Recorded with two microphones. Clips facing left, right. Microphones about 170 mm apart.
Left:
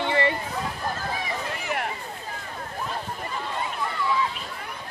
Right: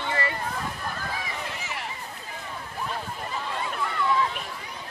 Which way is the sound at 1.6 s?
55° left (ahead or behind).